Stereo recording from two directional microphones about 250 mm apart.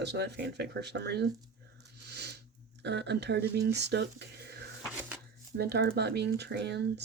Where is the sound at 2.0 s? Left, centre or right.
Right.